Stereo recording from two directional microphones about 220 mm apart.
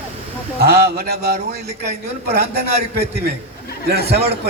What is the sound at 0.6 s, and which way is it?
Speech, 45° right (ahead or behind).